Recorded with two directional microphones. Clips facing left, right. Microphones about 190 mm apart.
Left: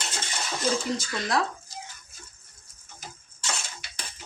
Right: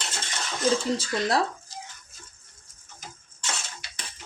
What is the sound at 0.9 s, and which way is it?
Speech, 30° right (ahead or behind).